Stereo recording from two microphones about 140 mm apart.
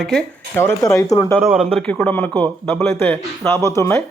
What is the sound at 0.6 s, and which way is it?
Speech, 20° left (ahead or behind).